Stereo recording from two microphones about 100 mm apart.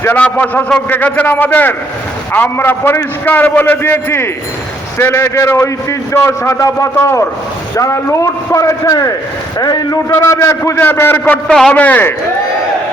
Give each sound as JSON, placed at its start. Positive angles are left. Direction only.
{"t": 0.0, "sound": "a man's voice", "side_deg": 20}
{"t": 10.1, "sound": "a man's voice", "side_deg": 30}
{"t": 11.4, "sound": "a man's voice", "side_deg": 5}
{"t": 11.7, "sound": "a man's voice", "side_deg": 15}